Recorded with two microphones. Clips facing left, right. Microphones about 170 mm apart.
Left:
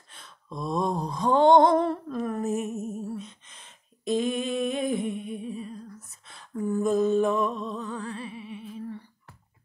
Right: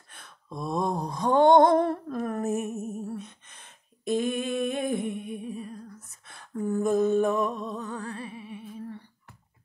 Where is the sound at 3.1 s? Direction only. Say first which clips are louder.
Left 1 dB; 55° right (ahead or behind).